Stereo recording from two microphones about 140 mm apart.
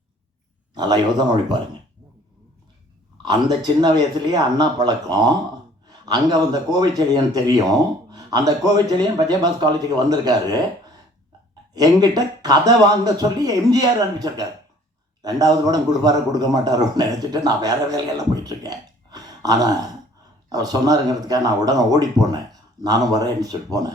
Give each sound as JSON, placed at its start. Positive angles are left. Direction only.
{"t": 0.7, "sound": "a sound", "side_deg": -30}
{"t": 3.2, "sound": "a man's voice", "side_deg": -30}
{"t": 11.7, "sound": "a man's voice", "side_deg": -25}